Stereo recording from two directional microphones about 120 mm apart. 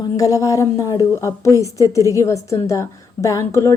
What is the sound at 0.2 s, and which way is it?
A woman's voice, 30° left (ahead or behind).